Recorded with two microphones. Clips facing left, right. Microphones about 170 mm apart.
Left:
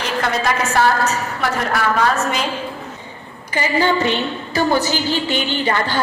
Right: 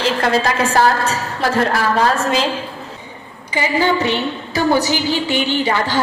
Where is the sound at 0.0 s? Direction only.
30° right (ahead or behind).